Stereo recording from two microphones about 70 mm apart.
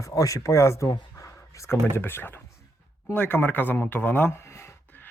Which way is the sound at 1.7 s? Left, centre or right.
Left.